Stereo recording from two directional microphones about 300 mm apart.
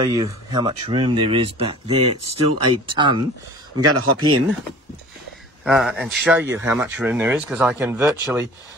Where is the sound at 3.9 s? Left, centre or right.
Right.